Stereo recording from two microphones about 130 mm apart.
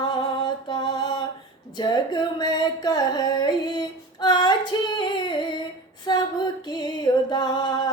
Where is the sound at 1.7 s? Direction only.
35° left (ahead or behind).